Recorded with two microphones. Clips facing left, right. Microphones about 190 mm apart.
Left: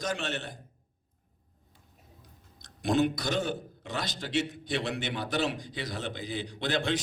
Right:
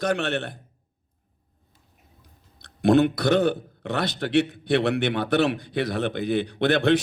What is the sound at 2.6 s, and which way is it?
A man's voice, 60° right (ahead or behind).